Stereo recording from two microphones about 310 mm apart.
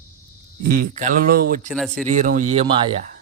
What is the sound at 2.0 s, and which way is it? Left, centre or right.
Speech, right.